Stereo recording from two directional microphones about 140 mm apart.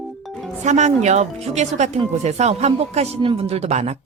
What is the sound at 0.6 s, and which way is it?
Speech, 55° right (ahead or behind).